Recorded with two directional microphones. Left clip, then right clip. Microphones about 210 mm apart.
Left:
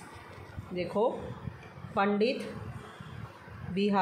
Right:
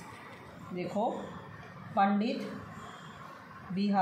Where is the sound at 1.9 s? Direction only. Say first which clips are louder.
Left 1 dB; 30° left (ahead or behind).